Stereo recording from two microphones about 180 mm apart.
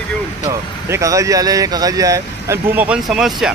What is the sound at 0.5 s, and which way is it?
Speech, 15° right (ahead or behind).